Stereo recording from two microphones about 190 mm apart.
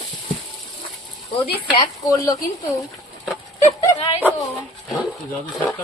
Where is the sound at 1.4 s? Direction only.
20° left (ahead or behind).